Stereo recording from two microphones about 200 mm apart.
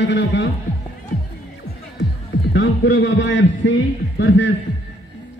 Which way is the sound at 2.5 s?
70° left (ahead or behind).